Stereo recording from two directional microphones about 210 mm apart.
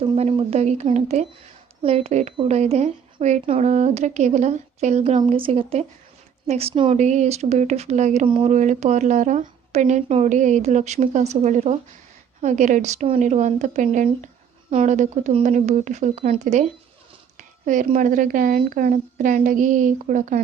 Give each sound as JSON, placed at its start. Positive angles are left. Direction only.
{"t": 0.0, "sound": "a woman's voice", "side_deg": -25}